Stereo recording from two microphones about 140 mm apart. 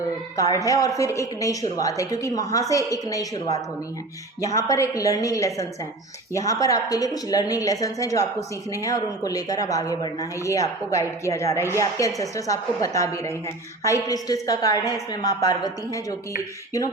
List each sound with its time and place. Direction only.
0.3 s a woman's voice: 25° left (ahead or behind)